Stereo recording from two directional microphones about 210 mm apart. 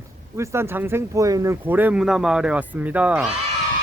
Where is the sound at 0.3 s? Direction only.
10° right (ahead or behind).